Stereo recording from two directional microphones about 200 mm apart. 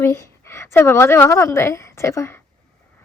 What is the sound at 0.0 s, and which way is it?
A woman's voice, 15° left (ahead or behind).